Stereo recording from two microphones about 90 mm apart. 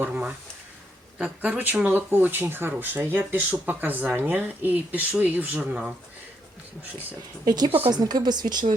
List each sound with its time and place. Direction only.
0.1 s speech: 15° right (ahead or behind)
7.4 s speech: 45° right (ahead or behind)